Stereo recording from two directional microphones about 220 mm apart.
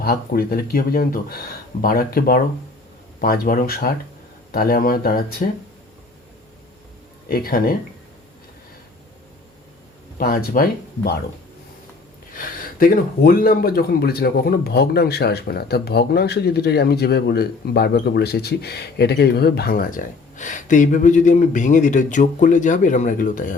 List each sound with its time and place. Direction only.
0.0 s speech: 45° left (ahead or behind)
7.3 s speech: 40° left (ahead or behind)
10.2 s speech: 40° left (ahead or behind)
12.3 s speech: 40° left (ahead or behind)